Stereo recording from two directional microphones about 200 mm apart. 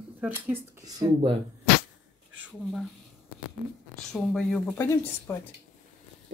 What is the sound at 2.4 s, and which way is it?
Speech, centre (ahead or behind).